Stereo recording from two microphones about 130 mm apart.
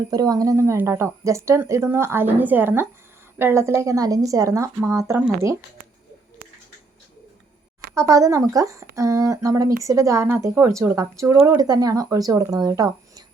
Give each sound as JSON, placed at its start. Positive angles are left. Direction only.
{"t": 0.1, "sound": "speech", "side_deg": -30}
{"t": 7.9, "sound": "speech", "side_deg": -25}